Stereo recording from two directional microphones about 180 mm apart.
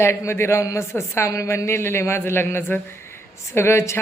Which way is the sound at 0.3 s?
15° left (ahead or behind).